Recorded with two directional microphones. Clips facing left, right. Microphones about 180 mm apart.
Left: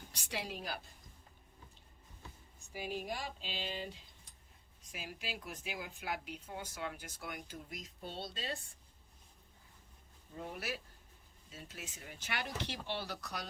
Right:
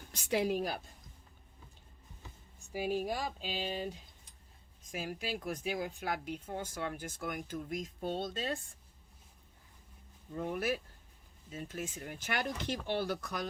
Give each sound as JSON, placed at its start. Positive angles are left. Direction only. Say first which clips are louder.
{"t": 0.1, "sound": "a woman's voice", "louder": "right 12 dB", "side_deg": -50}
{"t": 2.7, "sound": "a sound", "louder": "right 7 dB", "side_deg": -40}
{"t": 4.9, "sound": "speech", "louder": "right 7 dB", "side_deg": -45}
{"t": 10.3, "sound": "speech", "louder": "right 8 dB", "side_deg": -55}